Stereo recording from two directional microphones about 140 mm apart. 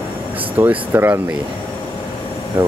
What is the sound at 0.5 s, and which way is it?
Speech, 15° right (ahead or behind).